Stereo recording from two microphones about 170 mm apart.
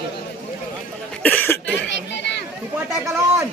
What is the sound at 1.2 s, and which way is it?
Cough, 10° left (ahead or behind).